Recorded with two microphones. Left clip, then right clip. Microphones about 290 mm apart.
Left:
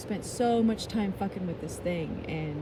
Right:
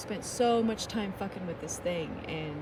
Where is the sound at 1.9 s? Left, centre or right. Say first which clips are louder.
Left 1 dB; centre.